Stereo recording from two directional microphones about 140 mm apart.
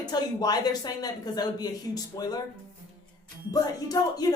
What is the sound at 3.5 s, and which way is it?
Speech, 25° left (ahead or behind).